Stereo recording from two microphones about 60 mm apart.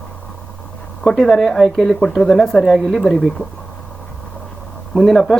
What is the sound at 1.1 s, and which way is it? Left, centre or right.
Speech, centre.